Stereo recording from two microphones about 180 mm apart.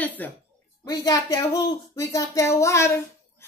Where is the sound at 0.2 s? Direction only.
10° left (ahead or behind).